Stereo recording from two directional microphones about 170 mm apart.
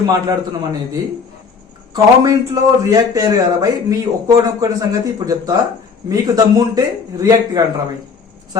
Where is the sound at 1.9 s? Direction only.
25° right (ahead or behind).